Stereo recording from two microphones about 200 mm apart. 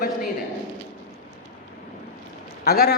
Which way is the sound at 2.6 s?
50° left (ahead or behind).